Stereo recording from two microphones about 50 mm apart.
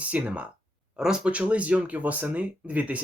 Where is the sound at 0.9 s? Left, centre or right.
Centre.